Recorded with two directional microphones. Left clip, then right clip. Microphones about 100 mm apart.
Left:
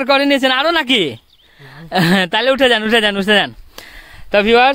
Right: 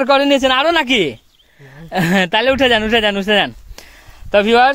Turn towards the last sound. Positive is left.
turn(degrees=35)  # may be behind; listen again after turning